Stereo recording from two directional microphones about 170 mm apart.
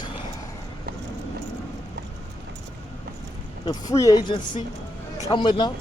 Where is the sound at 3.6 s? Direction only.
20° left (ahead or behind).